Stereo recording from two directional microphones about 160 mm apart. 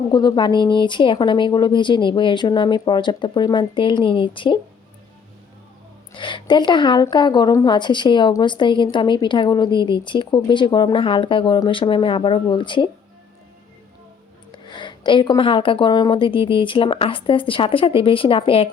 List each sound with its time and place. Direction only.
0.1 s a woman's voice: 25° left (ahead or behind)
6.1 s a woman's voice: 30° left (ahead or behind)
14.5 s a woman's voice: 30° left (ahead or behind)